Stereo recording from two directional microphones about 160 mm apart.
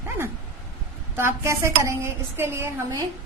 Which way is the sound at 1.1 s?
15° right (ahead or behind).